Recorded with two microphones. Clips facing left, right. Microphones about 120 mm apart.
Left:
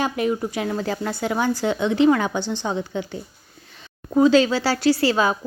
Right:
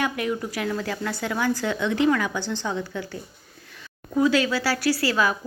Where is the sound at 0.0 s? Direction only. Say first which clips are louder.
Left 4 dB; 25° left (ahead or behind).